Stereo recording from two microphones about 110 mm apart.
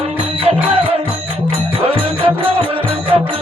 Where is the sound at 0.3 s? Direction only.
60° right (ahead or behind).